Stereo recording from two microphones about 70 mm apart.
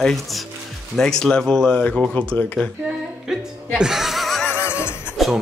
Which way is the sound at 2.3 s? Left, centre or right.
Centre.